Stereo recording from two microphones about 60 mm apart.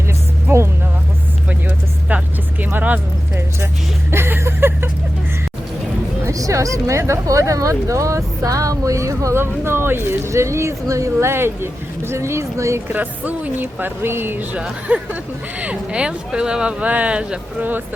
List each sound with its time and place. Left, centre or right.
2.0 s vehicle: right
2.6 s music: right
4.1 s a sound: right
6.2 s speech: right
9.3 s speech: right
12.9 s speech: right
14.5 s speech: right